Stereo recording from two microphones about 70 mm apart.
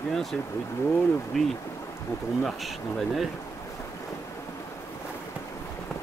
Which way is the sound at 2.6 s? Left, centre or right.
Centre.